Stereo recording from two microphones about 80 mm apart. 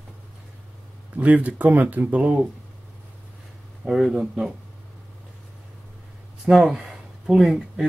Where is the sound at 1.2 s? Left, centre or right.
Centre.